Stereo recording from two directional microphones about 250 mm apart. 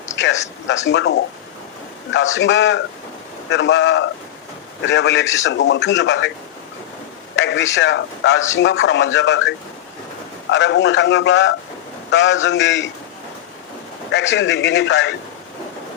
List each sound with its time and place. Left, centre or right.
0.2 s a man's voice: left
7.3 s a man's voice: left
14.1 s a man's voice: left